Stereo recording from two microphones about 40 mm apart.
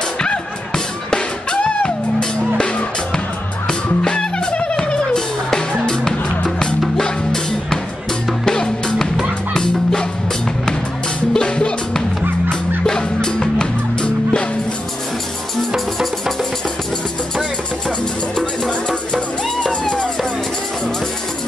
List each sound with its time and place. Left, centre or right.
1.6 s music: left
4.7 s music: centre
8.5 s music: centre
11.3 s music: left
15.7 s music: centre
18.6 s music: centre
19.1 s music: left